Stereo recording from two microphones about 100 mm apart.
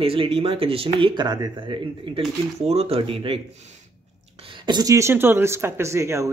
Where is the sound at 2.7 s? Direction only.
85° right; by 3.4 s 65° right (ahead or behind).